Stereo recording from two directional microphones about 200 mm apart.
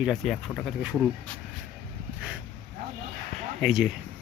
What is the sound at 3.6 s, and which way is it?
Speech, centre (ahead or behind).